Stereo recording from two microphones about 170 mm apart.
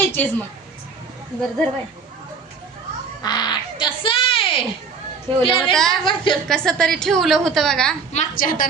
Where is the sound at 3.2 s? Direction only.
25° left (ahead or behind).